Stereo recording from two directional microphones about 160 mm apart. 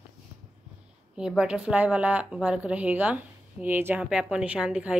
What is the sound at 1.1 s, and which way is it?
Speech, 5° right (ahead or behind).